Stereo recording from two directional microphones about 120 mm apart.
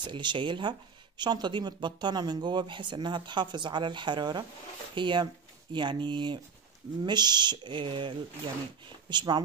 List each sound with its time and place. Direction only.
0.0 s speech: 40° right (ahead or behind)